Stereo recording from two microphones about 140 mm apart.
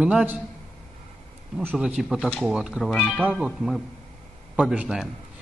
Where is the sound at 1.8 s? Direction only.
5° right (ahead or behind).